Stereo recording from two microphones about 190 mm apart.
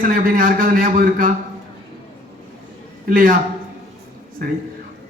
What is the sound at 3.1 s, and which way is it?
Speech, 45° right (ahead or behind).